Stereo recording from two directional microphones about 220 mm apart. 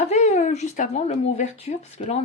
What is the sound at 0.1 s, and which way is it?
Speech, 30° left (ahead or behind).